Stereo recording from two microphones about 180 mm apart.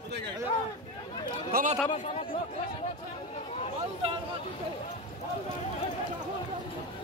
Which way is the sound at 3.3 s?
40° left (ahead or behind).